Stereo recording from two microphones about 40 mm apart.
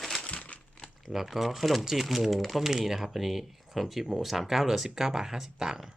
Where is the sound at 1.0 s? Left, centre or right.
Centre.